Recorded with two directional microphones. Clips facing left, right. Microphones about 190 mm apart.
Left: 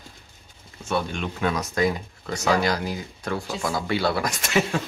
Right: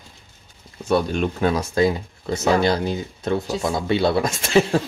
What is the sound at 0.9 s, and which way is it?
Speech, 40° right (ahead or behind).